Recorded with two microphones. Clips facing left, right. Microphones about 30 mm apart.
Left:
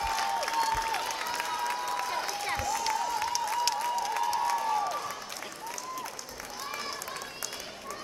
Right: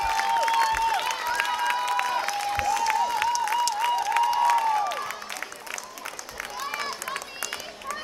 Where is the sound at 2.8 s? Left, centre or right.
Right.